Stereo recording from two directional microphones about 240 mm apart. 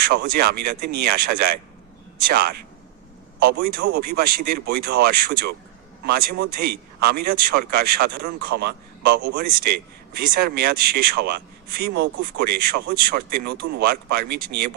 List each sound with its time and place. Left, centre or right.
0.0 s speech: right